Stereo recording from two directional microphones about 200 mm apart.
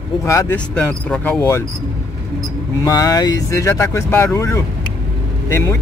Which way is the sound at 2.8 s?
15° left (ahead or behind).